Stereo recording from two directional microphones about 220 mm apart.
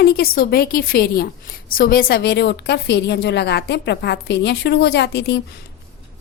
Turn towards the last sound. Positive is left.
turn(degrees=50)  # may be behind; listen again after turning